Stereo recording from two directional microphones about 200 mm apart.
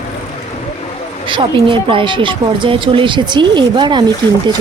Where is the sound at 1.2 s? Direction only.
25° right (ahead or behind).